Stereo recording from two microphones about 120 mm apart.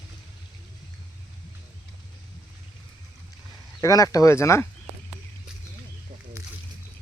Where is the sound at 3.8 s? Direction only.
30° left (ahead or behind).